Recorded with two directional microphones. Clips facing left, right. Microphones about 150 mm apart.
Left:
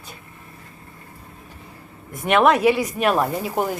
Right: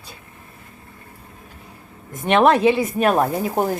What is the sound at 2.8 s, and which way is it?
Speech, 45° right (ahead or behind).